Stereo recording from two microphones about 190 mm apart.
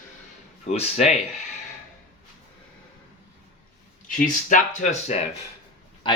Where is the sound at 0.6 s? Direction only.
35° left (ahead or behind).